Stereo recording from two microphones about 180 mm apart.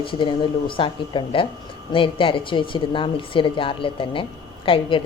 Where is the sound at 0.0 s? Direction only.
30° left (ahead or behind).